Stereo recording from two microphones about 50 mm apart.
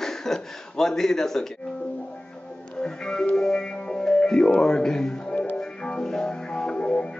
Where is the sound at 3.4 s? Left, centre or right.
Centre.